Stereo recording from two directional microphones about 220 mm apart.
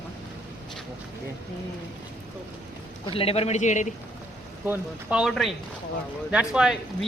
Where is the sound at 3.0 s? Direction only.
25° left (ahead or behind).